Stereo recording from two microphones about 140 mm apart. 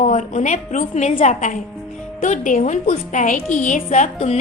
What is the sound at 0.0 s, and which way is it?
A woman's voice, 60° left (ahead or behind).